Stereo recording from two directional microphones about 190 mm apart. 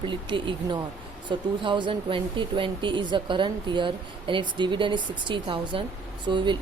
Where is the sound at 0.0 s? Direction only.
25° right (ahead or behind).